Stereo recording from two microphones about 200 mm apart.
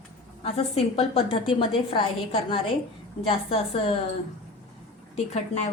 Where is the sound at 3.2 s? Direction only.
30° left (ahead or behind).